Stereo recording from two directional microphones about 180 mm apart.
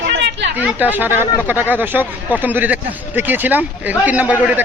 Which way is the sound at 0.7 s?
10° right (ahead or behind).